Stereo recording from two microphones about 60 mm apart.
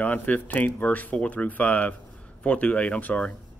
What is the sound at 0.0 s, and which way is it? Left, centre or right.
Speech, left.